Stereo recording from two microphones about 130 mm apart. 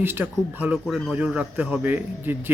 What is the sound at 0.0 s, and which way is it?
Speech, 15° right (ahead or behind).